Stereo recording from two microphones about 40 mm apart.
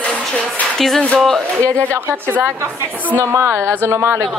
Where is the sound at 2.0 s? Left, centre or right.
Right.